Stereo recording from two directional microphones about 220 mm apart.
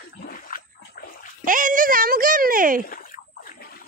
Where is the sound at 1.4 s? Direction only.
40° right (ahead or behind).